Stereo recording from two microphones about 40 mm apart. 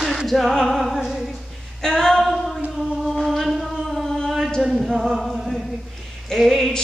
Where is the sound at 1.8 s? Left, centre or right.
Centre.